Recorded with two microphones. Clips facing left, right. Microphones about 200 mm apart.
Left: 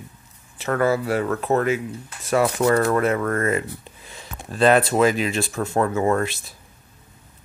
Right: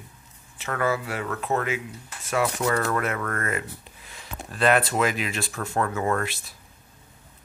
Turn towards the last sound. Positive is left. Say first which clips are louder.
# left 5 dB
turn(degrees=25)  # may be behind; listen again after turning